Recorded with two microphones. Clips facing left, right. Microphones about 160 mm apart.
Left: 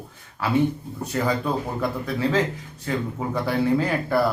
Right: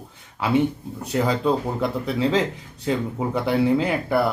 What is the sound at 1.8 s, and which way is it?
Speech, 20° right (ahead or behind).